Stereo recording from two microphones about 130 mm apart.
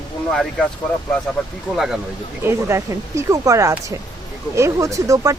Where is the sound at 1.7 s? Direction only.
5° right (ahead or behind).